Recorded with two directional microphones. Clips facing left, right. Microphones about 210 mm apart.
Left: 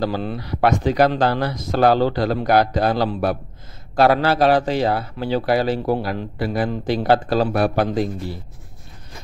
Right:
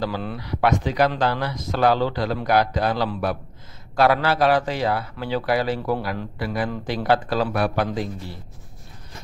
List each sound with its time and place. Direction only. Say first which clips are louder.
0.0 s speech: left 4 dB; 30° left (ahead or behind)